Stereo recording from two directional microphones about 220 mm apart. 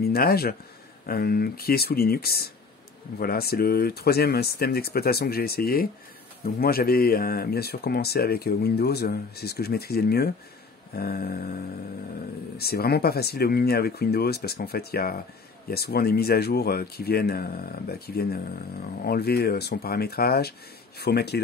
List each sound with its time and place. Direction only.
0.0 s speech: 45° left (ahead or behind)
12.5 s speech: 45° left (ahead or behind)